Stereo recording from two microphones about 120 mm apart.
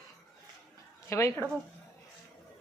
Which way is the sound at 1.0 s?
25° left (ahead or behind).